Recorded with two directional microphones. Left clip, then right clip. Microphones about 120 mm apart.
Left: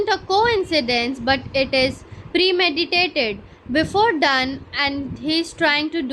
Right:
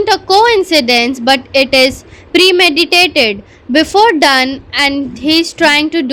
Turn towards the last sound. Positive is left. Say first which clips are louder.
# right 9 dB
turn(degrees=-45)  # may be behind; listen again after turning